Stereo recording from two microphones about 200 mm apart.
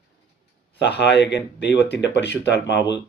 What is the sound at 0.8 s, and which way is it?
Speech, 60° left (ahead or behind).